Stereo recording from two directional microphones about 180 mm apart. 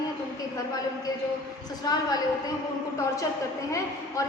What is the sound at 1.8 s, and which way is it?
Speech, 20° left (ahead or behind).